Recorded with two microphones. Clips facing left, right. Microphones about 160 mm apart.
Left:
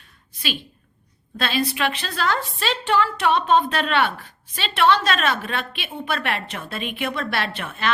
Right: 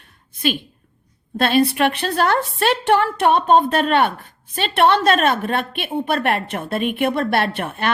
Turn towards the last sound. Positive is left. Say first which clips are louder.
# right 4 dB
turn(degrees=-50)  # may be behind; listen again after turning